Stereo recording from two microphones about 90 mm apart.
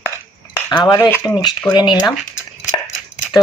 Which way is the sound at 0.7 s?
45° left (ahead or behind).